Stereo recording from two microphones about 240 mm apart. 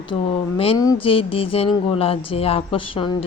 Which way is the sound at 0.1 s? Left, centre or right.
Left.